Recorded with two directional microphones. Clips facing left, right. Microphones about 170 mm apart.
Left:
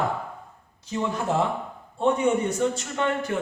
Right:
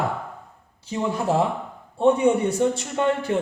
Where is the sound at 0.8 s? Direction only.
30° right (ahead or behind).